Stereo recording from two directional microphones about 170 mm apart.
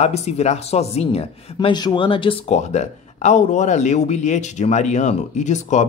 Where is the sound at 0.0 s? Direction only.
40° left (ahead or behind).